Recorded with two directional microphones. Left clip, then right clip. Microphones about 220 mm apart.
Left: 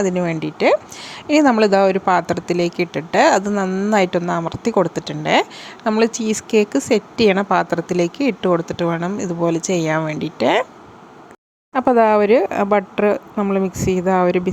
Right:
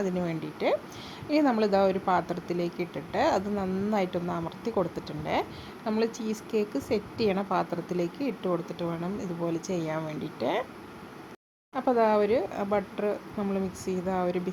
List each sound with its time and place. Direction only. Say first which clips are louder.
0.0 s speech: left 11 dB; 25° left (ahead or behind)
11.7 s speech: left 11 dB; 35° left (ahead or behind)